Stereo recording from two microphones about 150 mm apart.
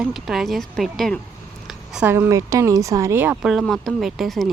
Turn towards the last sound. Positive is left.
turn(degrees=0)  # may be behind; listen again after turning